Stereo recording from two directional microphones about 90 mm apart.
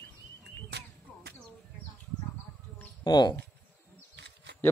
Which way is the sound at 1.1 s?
15° left (ahead or behind).